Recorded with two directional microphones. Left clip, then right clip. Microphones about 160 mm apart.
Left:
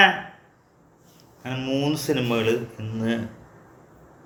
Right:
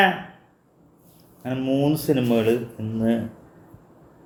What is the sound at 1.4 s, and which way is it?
A man's voice, 25° right (ahead or behind).